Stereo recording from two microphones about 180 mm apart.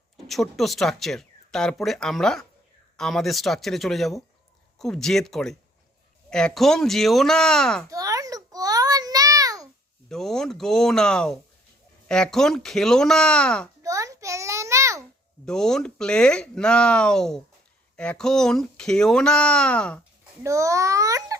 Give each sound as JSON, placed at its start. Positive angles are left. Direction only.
{"t": 0.3, "sound": "speech", "side_deg": 0}
{"t": 7.9, "sound": "a sound", "side_deg": -20}
{"t": 10.1, "sound": "speech", "side_deg": 0}
{"t": 13.8, "sound": "a sound", "side_deg": -20}
{"t": 15.4, "sound": "speech", "side_deg": 5}
{"t": 20.4, "sound": "a child's voice", "side_deg": -15}